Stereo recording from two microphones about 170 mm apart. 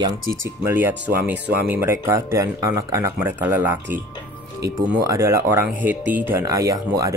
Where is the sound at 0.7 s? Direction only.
10° right (ahead or behind).